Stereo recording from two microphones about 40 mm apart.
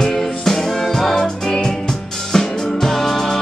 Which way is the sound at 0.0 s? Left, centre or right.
Centre.